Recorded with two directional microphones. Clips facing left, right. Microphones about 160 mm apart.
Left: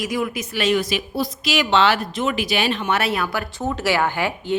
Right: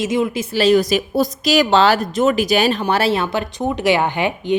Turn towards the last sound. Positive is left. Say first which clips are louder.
# right 3 dB
turn(degrees=-20)  # may be behind; listen again after turning